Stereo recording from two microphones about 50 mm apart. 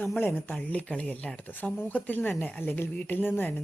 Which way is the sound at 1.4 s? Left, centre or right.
Left.